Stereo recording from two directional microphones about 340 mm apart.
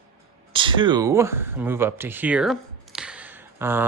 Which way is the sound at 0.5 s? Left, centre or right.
Centre.